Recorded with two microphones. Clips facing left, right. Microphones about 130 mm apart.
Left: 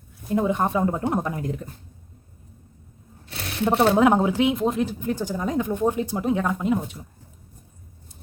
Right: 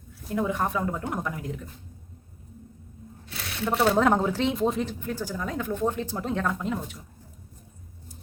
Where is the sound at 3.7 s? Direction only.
25° left (ahead or behind).